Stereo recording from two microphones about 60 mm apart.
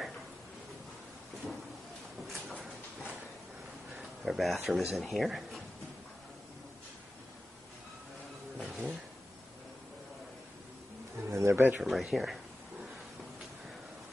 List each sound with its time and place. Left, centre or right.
2.3 s a sound: centre
4.0 s speech: centre
8.5 s a sound: centre
11.2 s pigeon: right
11.5 s speech: right
11.8 s speech: centre